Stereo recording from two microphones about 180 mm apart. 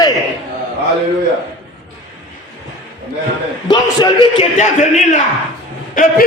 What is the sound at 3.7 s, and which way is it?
Speech, 25° left (ahead or behind).